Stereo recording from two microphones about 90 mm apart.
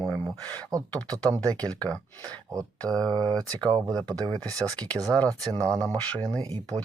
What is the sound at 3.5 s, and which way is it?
Speech, 50° right (ahead or behind).